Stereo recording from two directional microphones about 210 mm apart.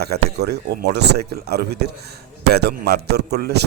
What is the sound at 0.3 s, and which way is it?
Speech, 50° right (ahead or behind).